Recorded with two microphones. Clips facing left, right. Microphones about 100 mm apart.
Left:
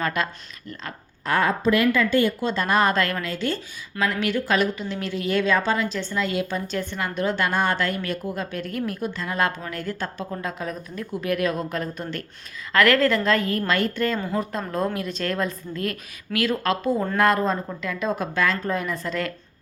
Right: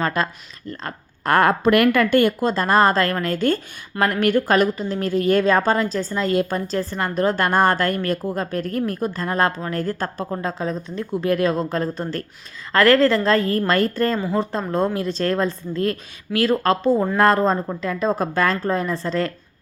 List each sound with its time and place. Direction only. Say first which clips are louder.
0.0 s a woman's voice: right 3 dB; 35° right (ahead or behind)
0.7 s speech: right 5 dB; 45° right (ahead or behind)
2.5 s a woman's voice: right 4 dB; 35° right (ahead or behind)